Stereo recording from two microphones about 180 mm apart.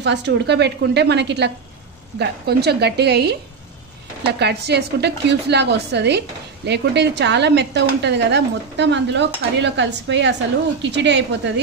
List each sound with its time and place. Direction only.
0.0 s a woman's voice: 75° right (ahead or behind)